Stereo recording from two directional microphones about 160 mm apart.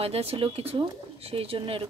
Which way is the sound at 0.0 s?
40° right (ahead or behind).